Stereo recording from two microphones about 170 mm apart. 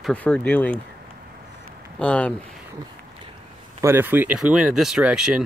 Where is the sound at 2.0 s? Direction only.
5° left (ahead or behind).